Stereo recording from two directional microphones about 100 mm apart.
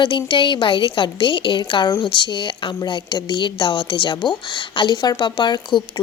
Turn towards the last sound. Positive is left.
turn(degrees=50)  # may be behind; listen again after turning